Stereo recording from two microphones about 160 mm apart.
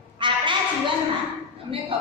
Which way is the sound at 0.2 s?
30° right (ahead or behind).